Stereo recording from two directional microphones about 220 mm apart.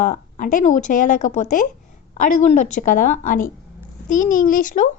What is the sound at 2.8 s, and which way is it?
A woman's voice, 35° left (ahead or behind).